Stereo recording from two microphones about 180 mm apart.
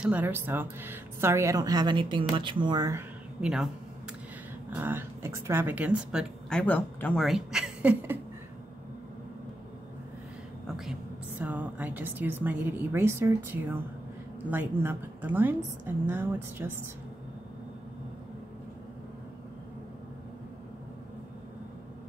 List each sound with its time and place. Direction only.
0.0 s speech: 10° right (ahead or behind)
3.3 s speech: 5° right (ahead or behind)
6.5 s speech: 10° left (ahead or behind); by 8.2 s 5° right (ahead or behind)
10.9 s speech: 10° right (ahead or behind)